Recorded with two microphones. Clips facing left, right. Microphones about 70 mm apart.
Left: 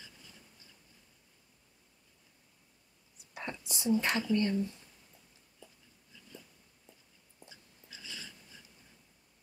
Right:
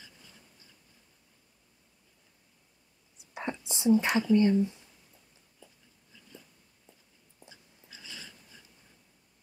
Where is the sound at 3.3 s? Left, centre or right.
Right.